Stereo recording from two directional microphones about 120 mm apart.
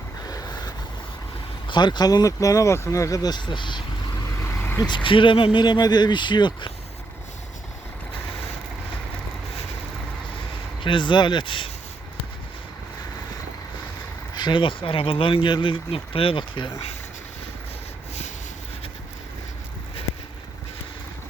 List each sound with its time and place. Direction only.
0.3 s vehicle: 35° left (ahead or behind)
1.6 s speech: 40° left (ahead or behind)
4.4 s vehicle: 20° left (ahead or behind)
5.0 s speech: 45° left (ahead or behind)
10.8 s speech: 40° left (ahead or behind)
14.3 s speech: 40° left (ahead or behind)